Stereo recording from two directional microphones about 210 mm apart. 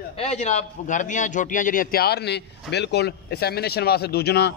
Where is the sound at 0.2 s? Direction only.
30° left (ahead or behind).